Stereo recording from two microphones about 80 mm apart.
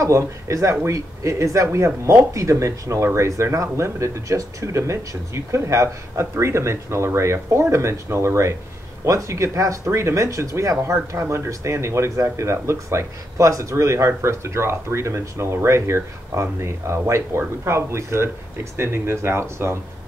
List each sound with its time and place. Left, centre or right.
0.0 s speech: right